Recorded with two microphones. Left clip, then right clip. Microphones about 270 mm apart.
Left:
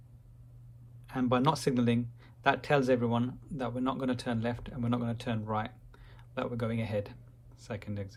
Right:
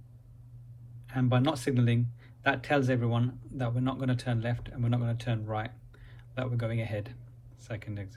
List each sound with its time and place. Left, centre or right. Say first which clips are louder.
1.1 s speech: left 1 dB; left